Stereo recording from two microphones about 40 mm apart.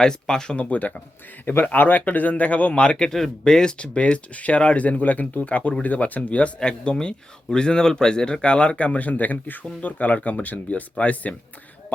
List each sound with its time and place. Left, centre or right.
0.0 s speech: centre
0.5 s speech: left
1.5 s speech: left
2.8 s speech: left
3.1 s speech: centre
3.4 s speech: centre; by 6.5 s left
6.6 s speech: left